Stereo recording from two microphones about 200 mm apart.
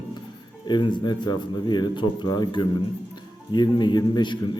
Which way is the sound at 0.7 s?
20° left (ahead or behind).